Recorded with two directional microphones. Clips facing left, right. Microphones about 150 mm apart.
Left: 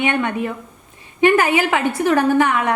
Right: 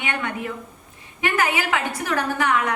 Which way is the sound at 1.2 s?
30° left (ahead or behind).